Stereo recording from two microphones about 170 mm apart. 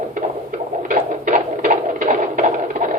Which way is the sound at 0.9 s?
50° right (ahead or behind).